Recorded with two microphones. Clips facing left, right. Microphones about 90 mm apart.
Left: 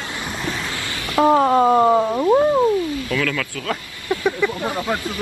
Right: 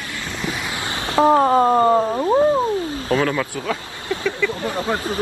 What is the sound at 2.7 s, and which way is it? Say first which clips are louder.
Speech: right 1 dB; 35° right (ahead or behind).